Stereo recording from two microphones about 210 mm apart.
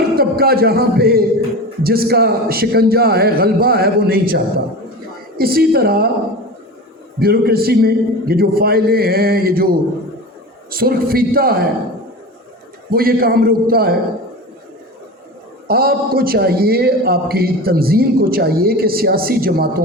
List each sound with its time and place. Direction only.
0.2 s a man's voice: 45° right (ahead or behind)
7.2 s a man's voice: 45° right (ahead or behind)
12.9 s a man's voice: 45° right (ahead or behind)
15.6 s a man's voice: 45° right (ahead or behind)